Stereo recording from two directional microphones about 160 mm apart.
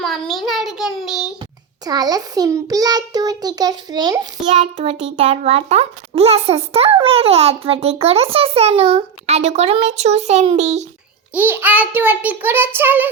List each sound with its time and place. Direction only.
0.0 s child singing: centre (ahead or behind)
1.8 s a child's voice: 25° right (ahead or behind)
4.6 s a child's voice: 35° right (ahead or behind)
11.3 s a child's voice: 10° right (ahead or behind)